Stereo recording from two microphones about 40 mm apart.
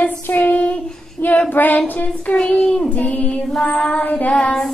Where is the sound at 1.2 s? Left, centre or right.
Left.